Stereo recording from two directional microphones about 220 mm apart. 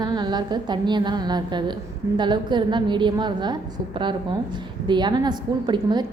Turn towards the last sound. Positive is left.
turn(degrees=-20)  # may be behind; listen again after turning